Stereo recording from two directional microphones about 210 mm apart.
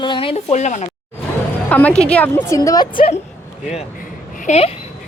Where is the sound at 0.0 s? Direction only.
25° left (ahead or behind).